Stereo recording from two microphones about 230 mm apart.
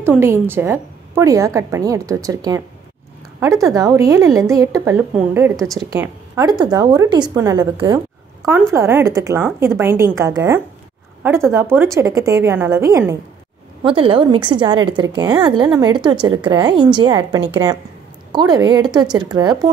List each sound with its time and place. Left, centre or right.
0.0 s a woman's voice: centre
3.6 s a woman's voice: centre